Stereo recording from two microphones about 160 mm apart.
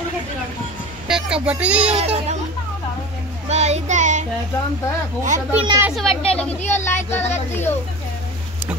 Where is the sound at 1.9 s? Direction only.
40° right (ahead or behind).